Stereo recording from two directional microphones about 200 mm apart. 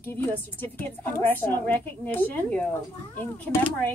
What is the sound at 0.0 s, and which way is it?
Speech, 10° left (ahead or behind).